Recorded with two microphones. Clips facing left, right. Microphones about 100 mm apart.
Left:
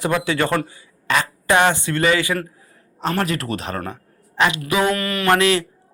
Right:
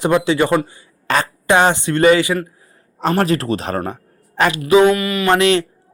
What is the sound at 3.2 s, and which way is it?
A woman's voice, 30° right (ahead or behind).